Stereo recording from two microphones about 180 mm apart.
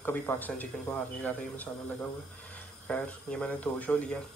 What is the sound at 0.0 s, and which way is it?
Speech, 10° left (ahead or behind).